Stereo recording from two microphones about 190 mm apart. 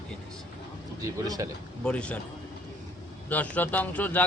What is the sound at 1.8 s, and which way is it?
Speech, 5° left (ahead or behind).